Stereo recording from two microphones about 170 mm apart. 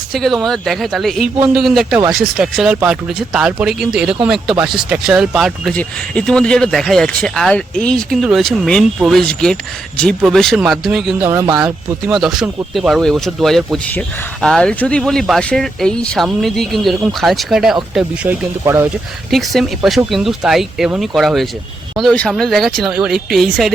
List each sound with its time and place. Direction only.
0.1 s speech: centre (ahead or behind)
11.3 s speech: 15° right (ahead or behind)
11.5 s speech: 5° right (ahead or behind)
19.3 s speech: centre (ahead or behind)